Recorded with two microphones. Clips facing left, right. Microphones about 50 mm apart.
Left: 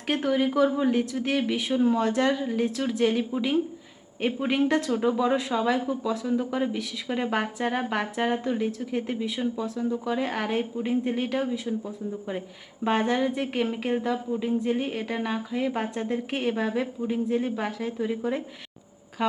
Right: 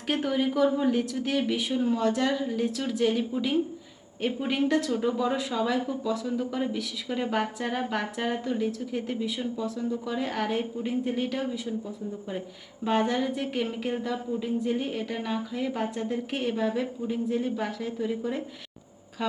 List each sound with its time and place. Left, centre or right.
0.1 s speech: centre
4.9 s speech: centre
12.9 s speech: centre
16.3 s speech: centre